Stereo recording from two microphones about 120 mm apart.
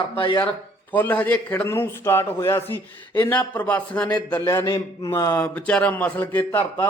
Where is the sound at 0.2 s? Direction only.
45° left (ahead or behind).